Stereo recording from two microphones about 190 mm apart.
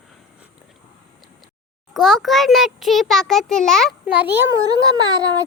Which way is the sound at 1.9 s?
Centre (ahead or behind).